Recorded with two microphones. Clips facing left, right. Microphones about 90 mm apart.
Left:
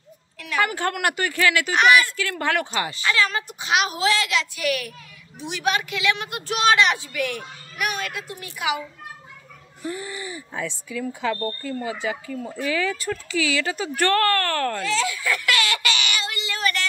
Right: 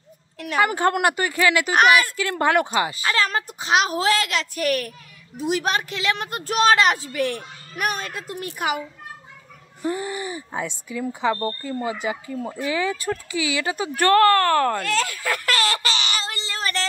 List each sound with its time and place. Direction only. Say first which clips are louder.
0.7 s speech: right 4 dB; 25° right (ahead or behind)
1.7 s a woman's voice: even; 40° right (ahead or behind)
2.4 s speech: right 5 dB; 20° right (ahead or behind)
3.0 s a woman's voice: even; 40° right (ahead or behind)
9.8 s speech: right 5 dB; 30° right (ahead or behind)
12.0 s speech: right 1 dB; 15° right (ahead or behind)
14.8 s baby laughter: even; 55° right (ahead or behind); by 16.8 s 30° right (ahead or behind)